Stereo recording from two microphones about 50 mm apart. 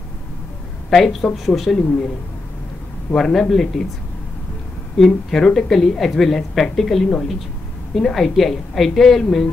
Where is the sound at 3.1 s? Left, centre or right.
Centre.